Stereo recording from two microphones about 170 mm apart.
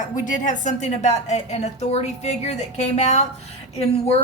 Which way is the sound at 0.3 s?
50° left (ahead or behind).